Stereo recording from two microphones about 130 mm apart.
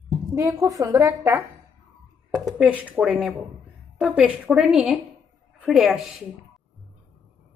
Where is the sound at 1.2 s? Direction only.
15° right (ahead or behind).